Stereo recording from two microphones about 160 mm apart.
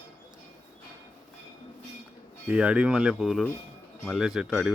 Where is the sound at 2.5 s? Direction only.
5° right (ahead or behind).